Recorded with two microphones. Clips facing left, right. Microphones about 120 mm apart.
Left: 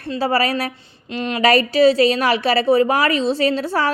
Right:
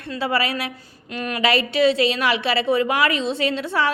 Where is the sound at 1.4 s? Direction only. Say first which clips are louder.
Left 5 dB; 40° left (ahead or behind).